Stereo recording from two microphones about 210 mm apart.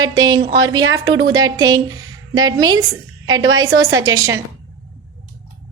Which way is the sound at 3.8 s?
15° right (ahead or behind).